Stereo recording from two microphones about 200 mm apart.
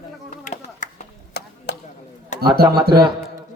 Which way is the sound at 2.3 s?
35° left (ahead or behind).